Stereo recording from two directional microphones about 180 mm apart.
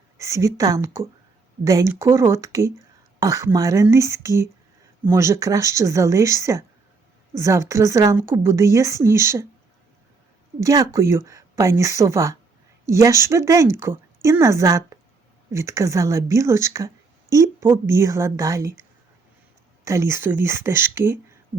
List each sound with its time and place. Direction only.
0.2 s a woman's voice: 15° right (ahead or behind)
10.6 s a woman's voice: 20° right (ahead or behind)